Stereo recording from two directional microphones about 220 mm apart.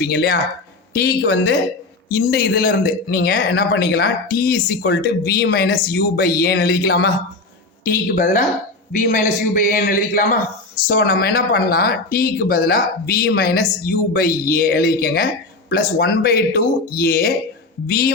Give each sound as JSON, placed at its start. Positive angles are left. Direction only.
{"t": 0.0, "sound": "speech", "side_deg": 45}
{"t": 8.0, "sound": "a man's voice", "side_deg": 35}